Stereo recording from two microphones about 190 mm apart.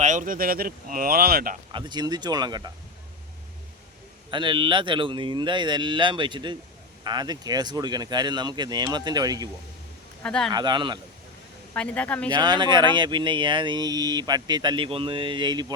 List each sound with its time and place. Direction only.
0.0 s speech: 40° right (ahead or behind)
1.7 s speech: 20° right (ahead or behind)
4.3 s speech: 25° right (ahead or behind)
10.2 s speech: 5° left (ahead or behind)
10.5 s speech: 25° right (ahead or behind)
11.7 s speech: 5° left (ahead or behind)
12.3 s speech: 25° right (ahead or behind)